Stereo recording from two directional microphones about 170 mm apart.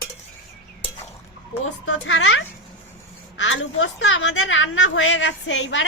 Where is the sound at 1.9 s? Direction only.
90° left.